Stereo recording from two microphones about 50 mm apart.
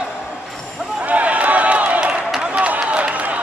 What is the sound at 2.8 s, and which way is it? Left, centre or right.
Run, right.